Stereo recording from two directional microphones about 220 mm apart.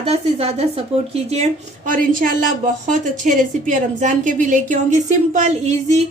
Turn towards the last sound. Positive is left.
turn(degrees=-30)  # may be behind; listen again after turning